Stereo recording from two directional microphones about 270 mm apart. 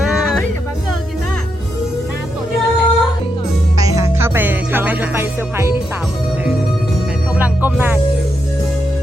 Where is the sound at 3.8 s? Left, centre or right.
Centre.